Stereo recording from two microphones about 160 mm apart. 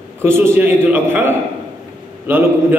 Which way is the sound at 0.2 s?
15° right (ahead or behind).